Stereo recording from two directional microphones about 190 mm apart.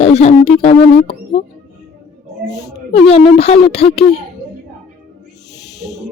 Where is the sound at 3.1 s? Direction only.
30° left (ahead or behind).